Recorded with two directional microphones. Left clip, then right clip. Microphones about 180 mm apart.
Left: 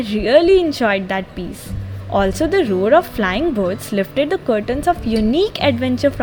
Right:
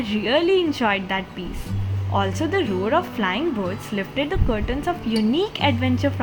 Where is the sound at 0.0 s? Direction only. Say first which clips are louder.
Left 7 dB; 20° left (ahead or behind).